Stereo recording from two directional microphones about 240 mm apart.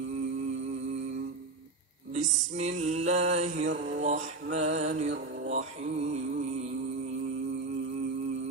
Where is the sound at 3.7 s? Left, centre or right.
Right.